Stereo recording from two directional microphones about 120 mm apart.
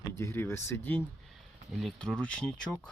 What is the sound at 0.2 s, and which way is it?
Speech, 20° left (ahead or behind).